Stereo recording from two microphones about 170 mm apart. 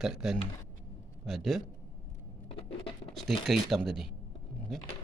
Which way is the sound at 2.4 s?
35° left (ahead or behind).